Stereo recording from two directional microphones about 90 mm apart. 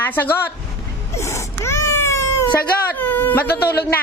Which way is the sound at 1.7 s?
30° left (ahead or behind).